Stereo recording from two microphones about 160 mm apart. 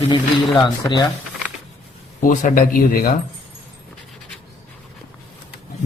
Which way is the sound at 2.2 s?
55° left (ahead or behind).